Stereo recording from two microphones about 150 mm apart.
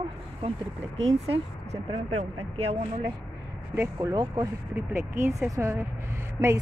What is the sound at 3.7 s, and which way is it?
Speech, 25° right (ahead or behind).